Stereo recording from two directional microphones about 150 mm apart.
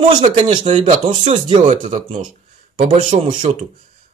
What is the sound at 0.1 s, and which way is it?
Speech, 35° right (ahead or behind).